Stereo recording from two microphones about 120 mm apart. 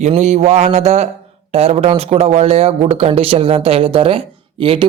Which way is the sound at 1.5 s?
60° right (ahead or behind).